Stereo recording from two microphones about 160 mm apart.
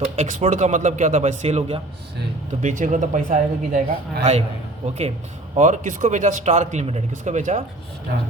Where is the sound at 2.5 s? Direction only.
50° right (ahead or behind).